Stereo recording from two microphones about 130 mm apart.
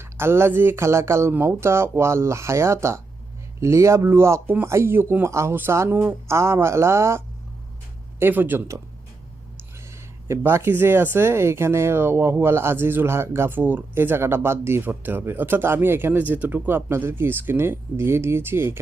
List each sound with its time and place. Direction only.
0.0 s a man's voice: 20° right (ahead or behind)
8.2 s speech: 15° right (ahead or behind)
9.9 s speech: 20° right (ahead or behind)